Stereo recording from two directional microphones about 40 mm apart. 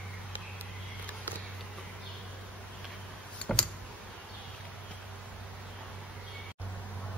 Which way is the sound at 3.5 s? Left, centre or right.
Centre.